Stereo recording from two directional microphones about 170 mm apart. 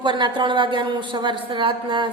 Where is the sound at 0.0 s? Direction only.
30° right (ahead or behind).